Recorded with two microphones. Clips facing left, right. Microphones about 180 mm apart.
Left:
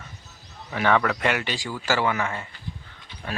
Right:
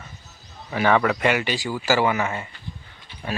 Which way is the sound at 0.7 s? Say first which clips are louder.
Right 2 dB; 5° right (ahead or behind).